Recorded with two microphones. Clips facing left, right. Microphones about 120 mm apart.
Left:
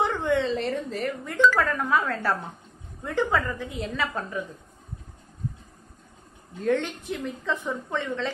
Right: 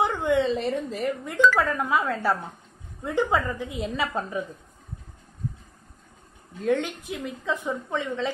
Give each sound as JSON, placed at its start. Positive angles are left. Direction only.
{"t": 0.0, "sound": "a woman's voice", "side_deg": -10}
{"t": 6.6, "sound": "a woman's voice", "side_deg": -5}